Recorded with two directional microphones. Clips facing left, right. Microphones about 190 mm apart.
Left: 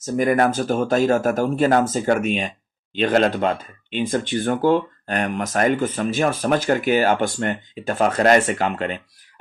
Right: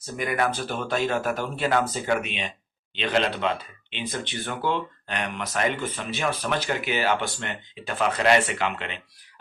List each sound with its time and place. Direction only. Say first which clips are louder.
0.0 s speech: left 8 dB; 45° left (ahead or behind)